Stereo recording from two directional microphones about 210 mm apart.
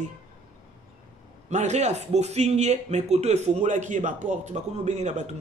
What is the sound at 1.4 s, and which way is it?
Speech, 35° right (ahead or behind).